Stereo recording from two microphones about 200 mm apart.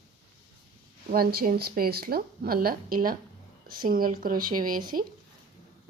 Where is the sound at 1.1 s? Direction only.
50° right (ahead or behind).